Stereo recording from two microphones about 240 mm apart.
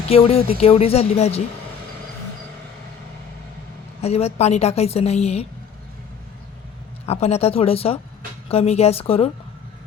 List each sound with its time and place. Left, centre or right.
0.1 s a woman's voice: left
4.0 s a woman's voice: left
7.0 s a woman's voice: left